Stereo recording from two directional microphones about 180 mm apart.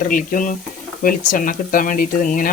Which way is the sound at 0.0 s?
50° left (ahead or behind).